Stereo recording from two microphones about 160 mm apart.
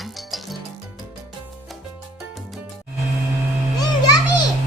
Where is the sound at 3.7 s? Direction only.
25° left (ahead or behind).